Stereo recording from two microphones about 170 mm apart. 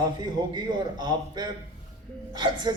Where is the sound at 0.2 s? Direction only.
25° right (ahead or behind).